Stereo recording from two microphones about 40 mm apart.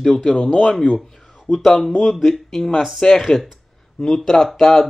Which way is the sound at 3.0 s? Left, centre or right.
Centre.